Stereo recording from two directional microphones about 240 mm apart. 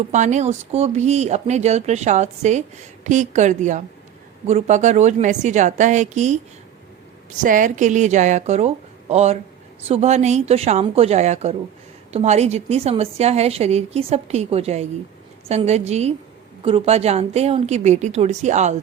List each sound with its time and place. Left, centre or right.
0.1 s speech: right
7.4 s speech: right